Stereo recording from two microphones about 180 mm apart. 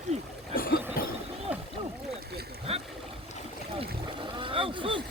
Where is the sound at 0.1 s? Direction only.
40° right (ahead or behind).